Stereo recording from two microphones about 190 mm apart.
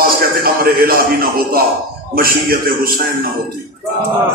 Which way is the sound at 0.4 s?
50° right (ahead or behind).